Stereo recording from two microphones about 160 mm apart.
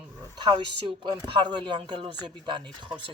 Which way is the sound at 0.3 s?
30° right (ahead or behind).